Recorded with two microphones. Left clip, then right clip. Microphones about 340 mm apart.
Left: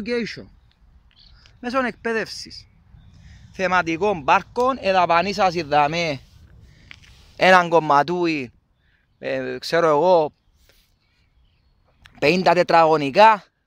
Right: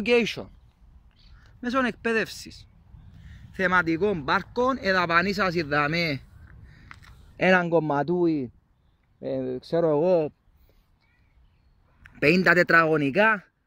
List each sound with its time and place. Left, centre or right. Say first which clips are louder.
0.0 s speech: right 3 dB; centre
1.6 s speech: left 3 dB; centre
7.3 s speech: left 7 dB; centre
8.1 s speech: left 2 dB; left
10.0 s speech: left 6 dB; centre
12.0 s speech: left 3 dB; centre